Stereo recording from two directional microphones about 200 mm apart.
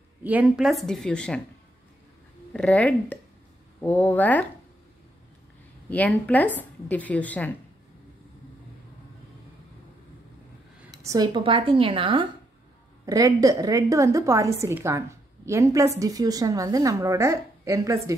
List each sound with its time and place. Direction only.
0.2 s speech: 10° right (ahead or behind)
2.5 s a woman's voice: 5° left (ahead or behind)
5.9 s a woman's voice: 10° left (ahead or behind)
10.9 s a woman's voice: 15° right (ahead or behind)